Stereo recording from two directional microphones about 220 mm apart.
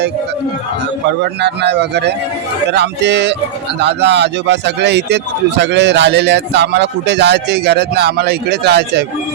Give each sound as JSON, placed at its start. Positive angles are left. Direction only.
{"t": 1.0, "sound": "speech", "side_deg": -50}